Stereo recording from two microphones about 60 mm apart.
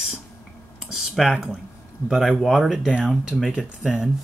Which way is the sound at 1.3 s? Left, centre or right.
Centre.